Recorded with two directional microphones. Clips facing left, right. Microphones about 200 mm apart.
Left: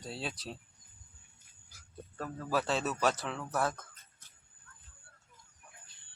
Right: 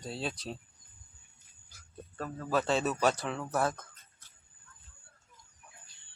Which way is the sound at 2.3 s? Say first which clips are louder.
Right 3 dB; 5° left (ahead or behind).